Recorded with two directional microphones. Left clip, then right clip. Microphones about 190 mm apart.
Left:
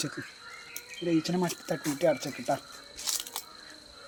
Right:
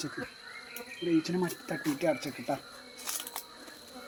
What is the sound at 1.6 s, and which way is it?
Speech, 40° left (ahead or behind).